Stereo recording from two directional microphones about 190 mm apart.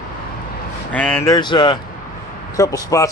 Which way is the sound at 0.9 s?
10° left (ahead or behind).